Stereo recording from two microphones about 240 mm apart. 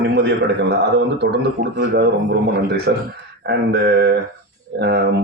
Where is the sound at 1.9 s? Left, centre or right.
Right.